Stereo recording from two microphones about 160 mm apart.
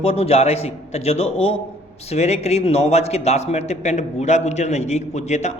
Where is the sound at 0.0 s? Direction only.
40° left (ahead or behind).